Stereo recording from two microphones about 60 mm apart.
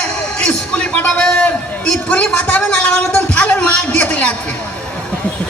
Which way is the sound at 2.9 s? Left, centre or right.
Left.